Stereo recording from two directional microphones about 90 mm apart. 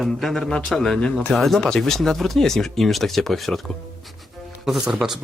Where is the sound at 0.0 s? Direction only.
Centre (ahead or behind).